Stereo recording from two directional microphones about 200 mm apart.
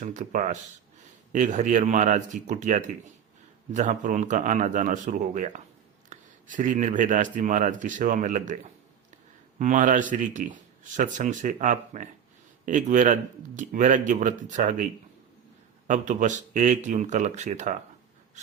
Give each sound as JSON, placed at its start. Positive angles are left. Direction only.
{"t": 0.0, "sound": "speech", "side_deg": -40}
{"t": 9.6, "sound": "speech", "side_deg": -40}
{"t": 15.9, "sound": "speech", "side_deg": -40}